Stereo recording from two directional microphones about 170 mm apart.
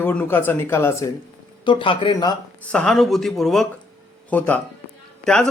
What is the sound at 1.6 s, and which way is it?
Speech, 30° left (ahead or behind).